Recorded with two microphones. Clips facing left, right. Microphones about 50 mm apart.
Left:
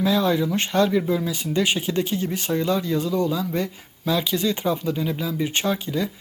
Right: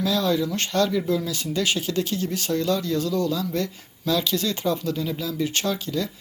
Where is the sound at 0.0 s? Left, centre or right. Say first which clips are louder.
Left 2 dB; left.